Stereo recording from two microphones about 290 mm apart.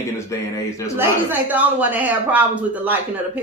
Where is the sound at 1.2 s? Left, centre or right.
Centre.